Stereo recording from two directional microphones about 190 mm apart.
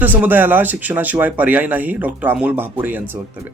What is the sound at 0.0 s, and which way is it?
Speech, 10° right (ahead or behind).